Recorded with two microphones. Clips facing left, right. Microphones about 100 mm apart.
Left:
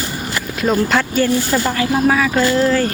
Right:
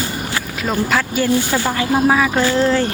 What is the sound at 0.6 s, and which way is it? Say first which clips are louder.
Speech: left 3 dB; centre (ahead or behind).